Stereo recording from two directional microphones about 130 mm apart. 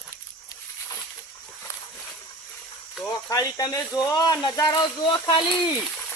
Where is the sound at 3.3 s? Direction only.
30° left (ahead or behind).